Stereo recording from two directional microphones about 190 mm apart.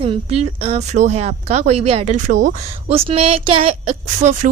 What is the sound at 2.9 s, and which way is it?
A woman's voice, 30° right (ahead or behind).